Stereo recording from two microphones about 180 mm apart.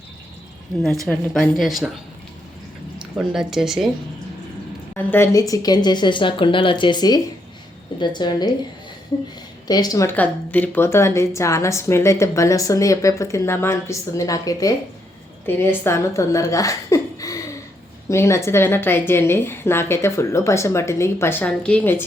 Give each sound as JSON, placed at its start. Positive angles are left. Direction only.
{"t": 1.0, "sound": "a woman's voice", "side_deg": 5}
{"t": 3.0, "sound": "speech", "side_deg": -5}
{"t": 5.1, "sound": "speech", "side_deg": 15}
{"t": 9.6, "sound": "speech", "side_deg": 20}